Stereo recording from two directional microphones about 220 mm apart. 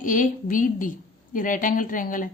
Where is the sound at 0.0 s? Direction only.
35° left (ahead or behind).